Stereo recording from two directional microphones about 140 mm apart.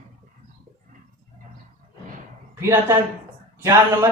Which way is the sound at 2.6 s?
20° right (ahead or behind).